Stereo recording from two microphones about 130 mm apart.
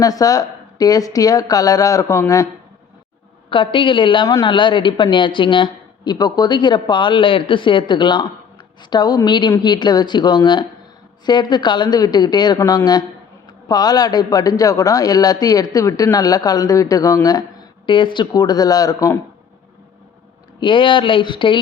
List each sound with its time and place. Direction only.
0.0 s a man's voice: 30° left (ahead or behind)
3.5 s a woman's voice: 40° left (ahead or behind); by 19.2 s 25° left (ahead or behind)
20.6 s a woman's voice: 40° left (ahead or behind)